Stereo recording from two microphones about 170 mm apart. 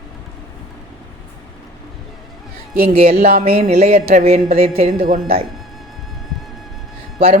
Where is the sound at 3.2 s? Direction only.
60° right (ahead or behind).